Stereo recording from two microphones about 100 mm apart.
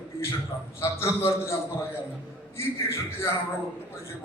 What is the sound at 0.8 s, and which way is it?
A man's voice, 25° left (ahead or behind).